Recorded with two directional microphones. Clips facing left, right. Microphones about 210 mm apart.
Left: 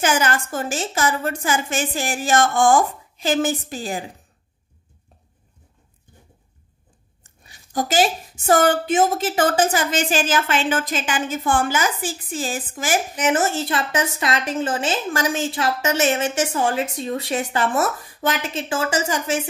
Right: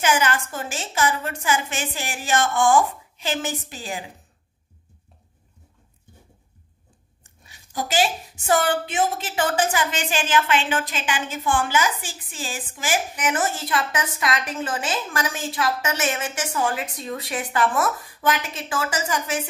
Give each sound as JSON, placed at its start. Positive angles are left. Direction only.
{"t": 0.0, "sound": "a woman's voice", "side_deg": 45}
{"t": 7.7, "sound": "a woman's voice", "side_deg": 45}
{"t": 13.1, "sound": "a woman's voice", "side_deg": 25}